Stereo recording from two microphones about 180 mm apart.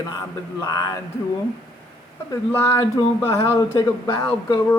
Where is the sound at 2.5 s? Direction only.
15° left (ahead or behind).